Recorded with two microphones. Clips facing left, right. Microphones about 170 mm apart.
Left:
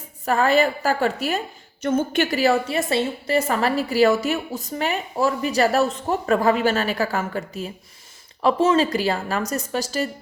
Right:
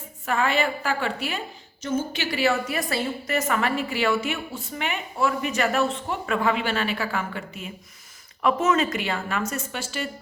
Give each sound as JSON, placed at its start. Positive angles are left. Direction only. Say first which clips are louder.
{"t": 0.3, "sound": "a woman's voice", "louder": "left 5 dB", "side_deg": 40}
{"t": 1.8, "sound": "a woman's voice", "louder": "left 6 dB", "side_deg": 55}